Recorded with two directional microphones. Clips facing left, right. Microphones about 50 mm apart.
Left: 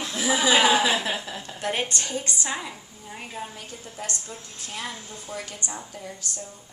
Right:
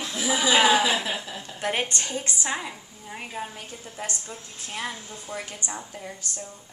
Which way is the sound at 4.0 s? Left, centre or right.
Right.